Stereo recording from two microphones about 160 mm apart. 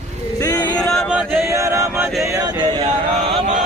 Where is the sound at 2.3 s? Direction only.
25° right (ahead or behind).